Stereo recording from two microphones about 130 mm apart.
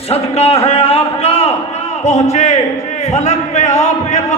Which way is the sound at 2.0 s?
60° left (ahead or behind).